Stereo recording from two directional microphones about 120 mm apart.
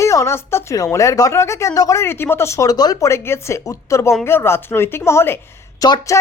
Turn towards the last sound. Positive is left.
turn(degrees=30)  # may be behind; listen again after turning